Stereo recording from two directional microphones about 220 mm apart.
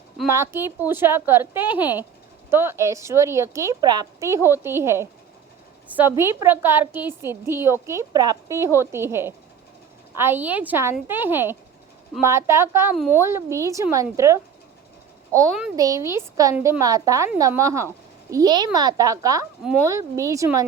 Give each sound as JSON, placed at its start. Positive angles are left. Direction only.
{"t": 0.3, "sound": "a woman's voice", "side_deg": -10}
{"t": 15.7, "sound": "a woman's voice", "side_deg": -15}